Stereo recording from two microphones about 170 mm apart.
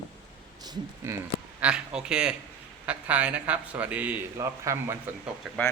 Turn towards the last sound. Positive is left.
turn(degrees=0)  # may be behind; listen again after turning